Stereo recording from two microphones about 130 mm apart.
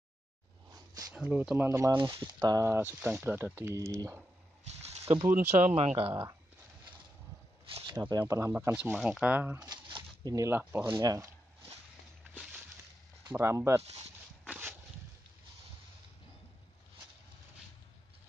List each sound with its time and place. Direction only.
0.7 s a sound: 30° right (ahead or behind)
1.1 s speech: 5° right (ahead or behind)
1.9 s speech: 35° right (ahead or behind)
2.4 s speech: 25° right (ahead or behind)
5.3 s speech: 70° right (ahead or behind)
5.8 s speech: 45° right (ahead or behind)
7.8 s speech: 30° right (ahead or behind)
8.9 s speech: 5° right (ahead or behind)
9.6 s a sound: 35° right (ahead or behind)
10.5 s speech: 15° right (ahead or behind)
13.3 s speech: 20° right (ahead or behind)
14.5 s a sound: 15° right (ahead or behind)